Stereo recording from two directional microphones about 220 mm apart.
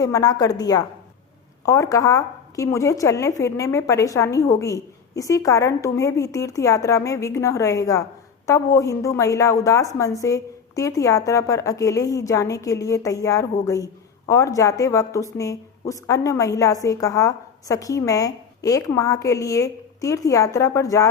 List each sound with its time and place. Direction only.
0.0 s a woman's voice: 15° left (ahead or behind)